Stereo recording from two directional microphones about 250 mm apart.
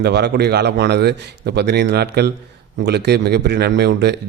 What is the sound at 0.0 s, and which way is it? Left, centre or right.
Speech, right.